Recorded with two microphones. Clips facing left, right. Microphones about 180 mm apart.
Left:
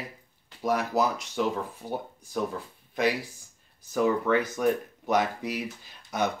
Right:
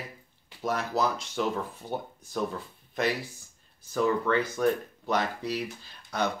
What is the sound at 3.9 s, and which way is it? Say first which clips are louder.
Speech: left 2 dB; 10° left (ahead or behind).